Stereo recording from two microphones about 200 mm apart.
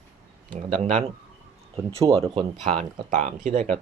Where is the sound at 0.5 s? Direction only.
40° right (ahead or behind).